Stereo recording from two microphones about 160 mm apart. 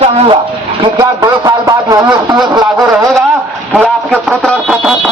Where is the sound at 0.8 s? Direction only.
20° right (ahead or behind).